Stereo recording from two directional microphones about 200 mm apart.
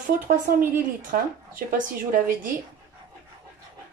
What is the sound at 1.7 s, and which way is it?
Speech, 45° right (ahead or behind).